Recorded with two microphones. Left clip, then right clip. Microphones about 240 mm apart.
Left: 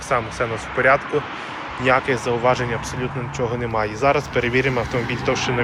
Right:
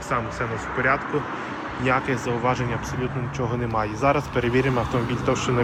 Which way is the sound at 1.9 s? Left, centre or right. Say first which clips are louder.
Left 5 dB; centre.